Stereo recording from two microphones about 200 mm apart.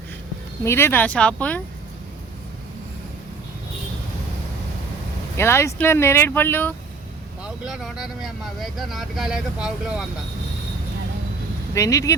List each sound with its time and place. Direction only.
0.6 s speech: 10° left (ahead or behind)
5.4 s speech: 10° left (ahead or behind)
7.4 s speech: centre (ahead or behind)
11.7 s speech: 15° left (ahead or behind)